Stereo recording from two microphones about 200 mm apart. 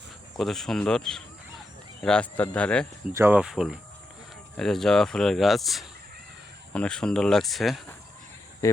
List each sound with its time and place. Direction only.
0.3 s speech: centre (ahead or behind)
3.1 s speech: 10° right (ahead or behind)
8.6 s speech: 15° left (ahead or behind)